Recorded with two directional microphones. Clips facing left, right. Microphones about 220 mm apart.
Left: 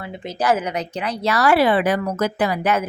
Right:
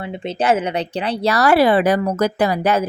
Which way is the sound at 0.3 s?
25° right (ahead or behind).